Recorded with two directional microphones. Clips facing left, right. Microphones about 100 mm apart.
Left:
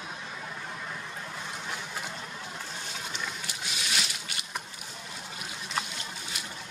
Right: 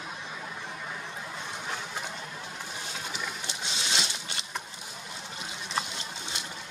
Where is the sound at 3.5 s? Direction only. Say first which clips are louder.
Right 1 dB; 25° right (ahead or behind).